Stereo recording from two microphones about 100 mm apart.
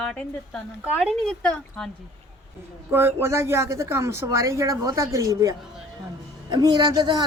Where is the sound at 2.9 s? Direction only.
25° right (ahead or behind).